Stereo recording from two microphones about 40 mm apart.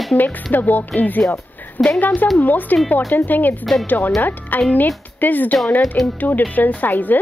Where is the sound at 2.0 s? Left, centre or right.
Left.